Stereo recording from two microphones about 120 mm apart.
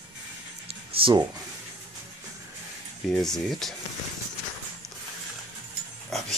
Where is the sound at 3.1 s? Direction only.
5° left (ahead or behind).